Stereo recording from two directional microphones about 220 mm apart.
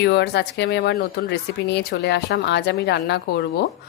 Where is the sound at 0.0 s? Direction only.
50° left (ahead or behind).